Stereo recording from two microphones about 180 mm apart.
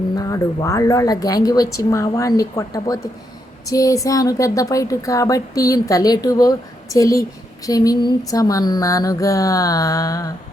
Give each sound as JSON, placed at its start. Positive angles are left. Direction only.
{"t": 0.2, "sound": "speech", "side_deg": 20}